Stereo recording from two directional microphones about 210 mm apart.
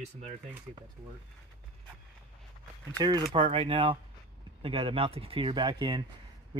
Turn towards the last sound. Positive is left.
turn(degrees=-20)  # may be behind; listen again after turning